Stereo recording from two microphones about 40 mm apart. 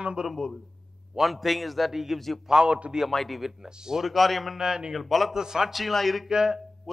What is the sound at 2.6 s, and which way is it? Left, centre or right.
Speech, right.